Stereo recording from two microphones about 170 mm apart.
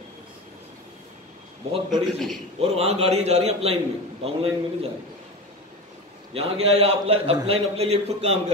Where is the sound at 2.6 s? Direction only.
40° right (ahead or behind).